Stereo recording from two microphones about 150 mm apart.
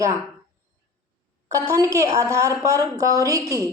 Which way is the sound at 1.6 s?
20° right (ahead or behind).